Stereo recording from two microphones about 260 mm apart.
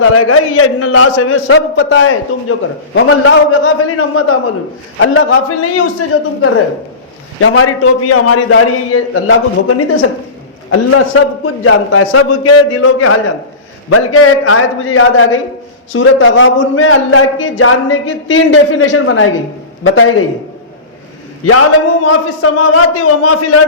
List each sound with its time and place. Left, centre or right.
0.0 s a man's voice: left
22.0 s a man's voice: left